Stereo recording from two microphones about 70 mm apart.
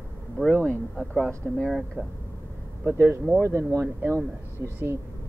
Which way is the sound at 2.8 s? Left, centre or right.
Right.